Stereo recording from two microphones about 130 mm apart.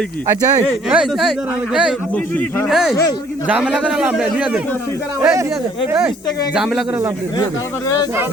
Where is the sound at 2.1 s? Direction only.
10° left (ahead or behind).